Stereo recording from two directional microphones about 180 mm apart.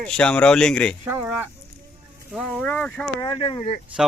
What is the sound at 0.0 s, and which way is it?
Speech, 5° left (ahead or behind).